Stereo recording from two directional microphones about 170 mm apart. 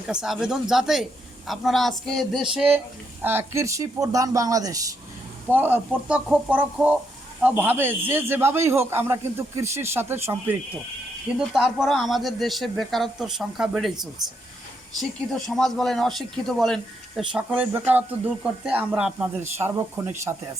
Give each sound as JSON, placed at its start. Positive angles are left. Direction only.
{"t": 0.1, "sound": "a man's voice", "side_deg": -5}
{"t": 11.3, "sound": "speech", "side_deg": -5}
{"t": 15.3, "sound": "a man's voice", "side_deg": 0}